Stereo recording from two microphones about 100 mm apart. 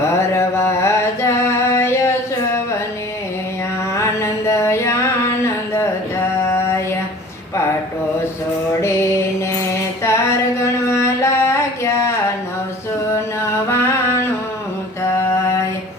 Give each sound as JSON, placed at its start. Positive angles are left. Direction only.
{"t": 0.0, "sound": "mantra", "side_deg": 25}
{"t": 3.9, "sound": "music", "side_deg": 25}
{"t": 6.4, "sound": "mantra", "side_deg": 25}
{"t": 8.8, "sound": "mantra", "side_deg": 25}
{"t": 13.7, "sound": "a sound", "side_deg": 25}